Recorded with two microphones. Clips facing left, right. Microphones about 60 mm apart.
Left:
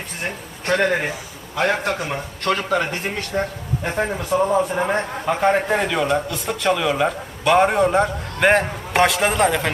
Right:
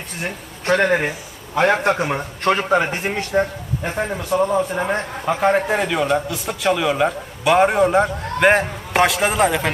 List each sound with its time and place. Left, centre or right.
0.2 s a man's voice: centre
1.8 s a man's voice: right; by 3.4 s centre
3.8 s a man's voice: centre